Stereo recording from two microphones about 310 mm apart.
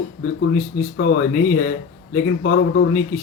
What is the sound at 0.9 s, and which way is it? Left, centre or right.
Speech, left.